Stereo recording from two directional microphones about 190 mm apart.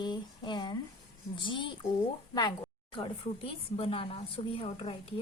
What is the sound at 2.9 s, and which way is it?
A woman's voice, 30° left (ahead or behind).